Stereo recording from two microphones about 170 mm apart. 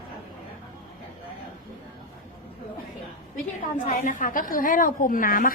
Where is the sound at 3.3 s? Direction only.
50° left (ahead or behind).